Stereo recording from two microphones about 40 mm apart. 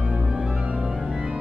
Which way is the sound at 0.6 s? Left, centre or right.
Right.